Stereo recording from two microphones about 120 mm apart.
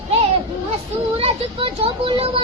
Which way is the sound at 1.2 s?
50° right (ahead or behind).